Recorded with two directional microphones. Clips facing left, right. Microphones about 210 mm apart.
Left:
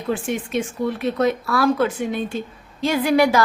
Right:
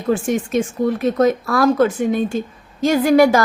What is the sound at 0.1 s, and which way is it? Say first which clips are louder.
A woman's voice: right 5 dB; 45° right (ahead or behind).